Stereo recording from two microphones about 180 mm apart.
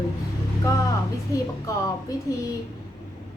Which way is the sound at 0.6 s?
20° left (ahead or behind).